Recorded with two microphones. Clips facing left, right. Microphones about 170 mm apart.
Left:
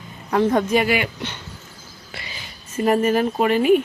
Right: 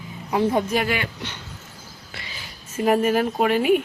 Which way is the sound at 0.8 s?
10° left (ahead or behind).